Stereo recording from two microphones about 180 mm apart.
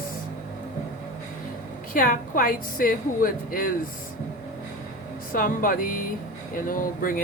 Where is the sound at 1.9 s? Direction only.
50° left (ahead or behind).